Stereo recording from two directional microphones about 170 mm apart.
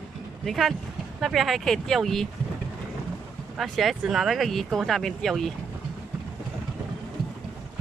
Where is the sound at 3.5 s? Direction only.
Centre (ahead or behind).